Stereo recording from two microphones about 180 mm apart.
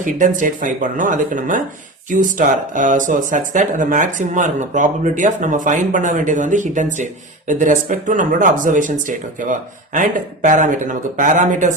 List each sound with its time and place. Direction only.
0.0 s speech: 45° right (ahead or behind)